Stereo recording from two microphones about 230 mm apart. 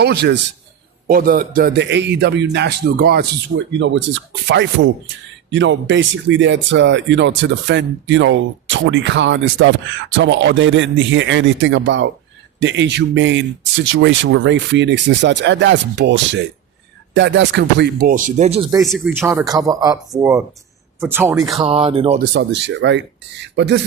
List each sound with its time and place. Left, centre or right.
0.0 s speech: right
18.8 s speech: centre
19.2 s speech: centre
21.5 s speech: right
22.2 s speech: right